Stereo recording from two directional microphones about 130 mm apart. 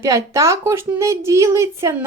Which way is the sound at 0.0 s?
25° right (ahead or behind).